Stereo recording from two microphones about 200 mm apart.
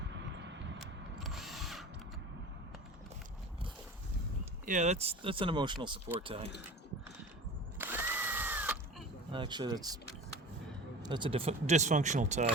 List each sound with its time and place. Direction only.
0.3 s vehicle: 65° right (ahead or behind)
0.8 s drill: centre (ahead or behind)
4.6 s speech: 40° right (ahead or behind)
7.8 s drill: 10° right (ahead or behind)
9.3 s speech: 25° right (ahead or behind)
11.0 s speech: 25° right (ahead or behind)